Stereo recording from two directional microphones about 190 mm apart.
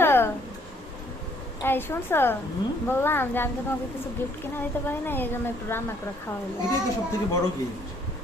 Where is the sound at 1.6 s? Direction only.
10° left (ahead or behind).